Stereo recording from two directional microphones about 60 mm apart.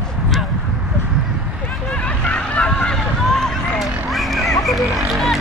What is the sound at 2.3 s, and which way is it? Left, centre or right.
Vehicle, centre.